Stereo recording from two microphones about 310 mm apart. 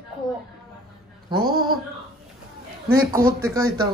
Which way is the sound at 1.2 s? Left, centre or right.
Centre.